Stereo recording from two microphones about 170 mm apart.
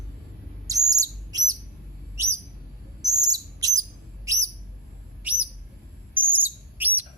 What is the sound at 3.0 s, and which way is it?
Bird, 20° right (ahead or behind).